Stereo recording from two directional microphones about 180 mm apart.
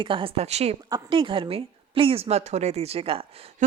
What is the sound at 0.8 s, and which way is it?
Speech, 25° right (ahead or behind).